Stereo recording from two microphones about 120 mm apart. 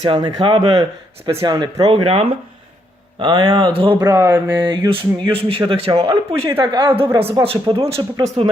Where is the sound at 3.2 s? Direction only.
40° right (ahead or behind).